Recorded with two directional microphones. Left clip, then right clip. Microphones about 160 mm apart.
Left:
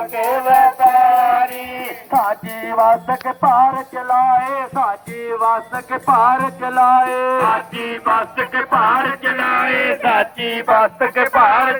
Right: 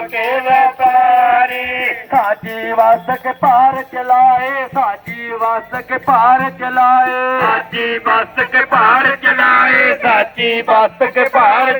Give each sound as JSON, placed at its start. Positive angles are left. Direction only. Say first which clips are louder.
{"t": 0.3, "sound": "music", "louder": "even", "side_deg": 90}
{"t": 2.0, "sound": "music", "louder": "right 1 dB", "side_deg": 10}
{"t": 2.6, "sound": "music", "louder": "right 2 dB", "side_deg": -15}